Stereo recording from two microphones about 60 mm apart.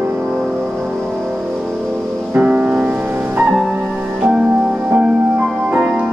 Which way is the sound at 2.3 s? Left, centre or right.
Centre.